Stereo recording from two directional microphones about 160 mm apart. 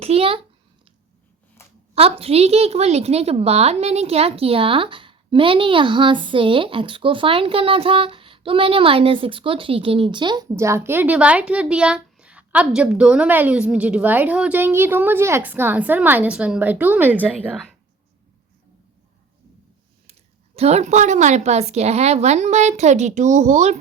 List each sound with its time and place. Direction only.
0.0 s a child's voice: 40° right (ahead or behind)
2.0 s a woman's voice: 40° right (ahead or behind); by 17.7 s 5° right (ahead or behind)
20.6 s a woman's voice: 40° right (ahead or behind)